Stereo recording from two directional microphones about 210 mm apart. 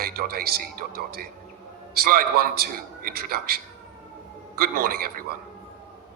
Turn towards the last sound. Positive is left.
turn(degrees=-45)  # may be behind; listen again after turning